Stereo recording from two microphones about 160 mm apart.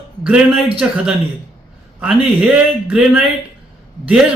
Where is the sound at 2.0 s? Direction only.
5° right (ahead or behind).